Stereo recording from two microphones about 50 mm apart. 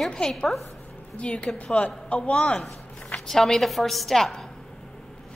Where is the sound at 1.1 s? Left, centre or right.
Left.